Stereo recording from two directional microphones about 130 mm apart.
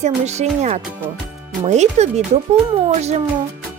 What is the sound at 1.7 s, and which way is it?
Speech, 60° right (ahead or behind).